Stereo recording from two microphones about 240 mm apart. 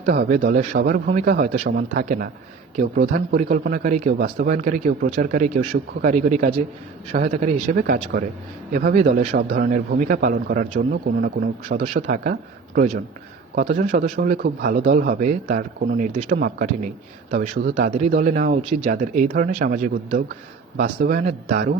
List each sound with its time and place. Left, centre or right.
0.0 s speech: right
18.2 s speech: right